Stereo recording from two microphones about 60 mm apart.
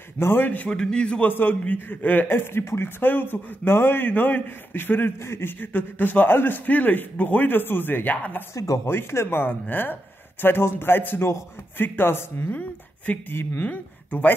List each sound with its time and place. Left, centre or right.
0.2 s a man's voice: left
0.7 s a man's voice: centre
1.3 s a man's voice: left
3.0 s a man's voice: left
8.8 s a man's voice: left
12.5 s speech: left